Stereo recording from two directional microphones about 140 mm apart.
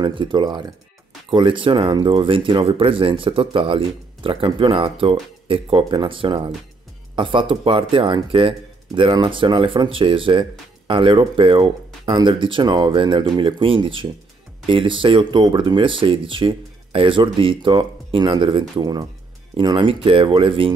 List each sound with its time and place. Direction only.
0.0 s speech: 35° right (ahead or behind)